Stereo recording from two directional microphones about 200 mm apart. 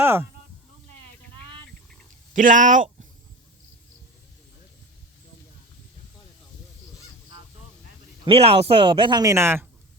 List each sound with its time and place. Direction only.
0.0 s a sound: 10° right (ahead or behind)
2.3 s speech: 40° right (ahead or behind)
8.2 s speech: 30° right (ahead or behind); by 9.6 s 10° right (ahead or behind)